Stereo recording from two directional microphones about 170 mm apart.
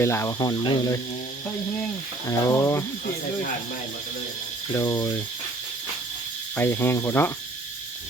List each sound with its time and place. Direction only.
0.0 s speech: 15° left (ahead or behind)
1.5 s cricket: 10° left (ahead or behind)
4.7 s speech: 20° left (ahead or behind)
6.6 s cricket: 15° left (ahead or behind)